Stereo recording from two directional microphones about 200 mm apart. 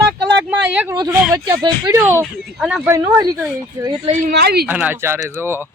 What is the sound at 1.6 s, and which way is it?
Speech, 20° right (ahead or behind).